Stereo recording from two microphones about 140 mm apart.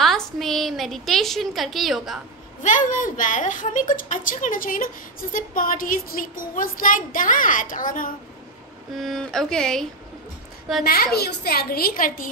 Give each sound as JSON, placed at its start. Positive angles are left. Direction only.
{"t": 0.0, "sound": "a woman's voice", "side_deg": 0}
{"t": 2.6, "sound": "a woman's voice", "side_deg": 65}
{"t": 8.9, "sound": "speech", "side_deg": 0}
{"t": 10.8, "sound": "a woman's voice", "side_deg": 90}